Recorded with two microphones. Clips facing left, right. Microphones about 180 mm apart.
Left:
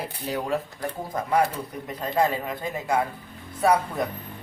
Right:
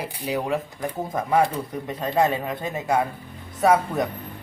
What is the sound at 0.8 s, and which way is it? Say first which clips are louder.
Speech: right 3 dB; 20° right (ahead or behind).